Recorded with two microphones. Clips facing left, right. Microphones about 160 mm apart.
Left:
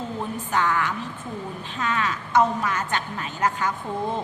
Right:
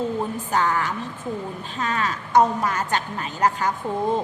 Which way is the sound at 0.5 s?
35° right (ahead or behind).